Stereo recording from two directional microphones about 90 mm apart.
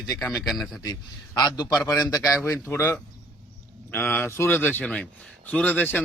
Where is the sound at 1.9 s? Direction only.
35° left (ahead or behind).